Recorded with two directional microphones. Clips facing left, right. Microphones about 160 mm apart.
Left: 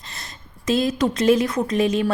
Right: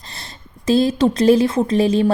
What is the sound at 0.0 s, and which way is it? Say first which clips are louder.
A woman's voice: right 2 dB; 30° right (ahead or behind).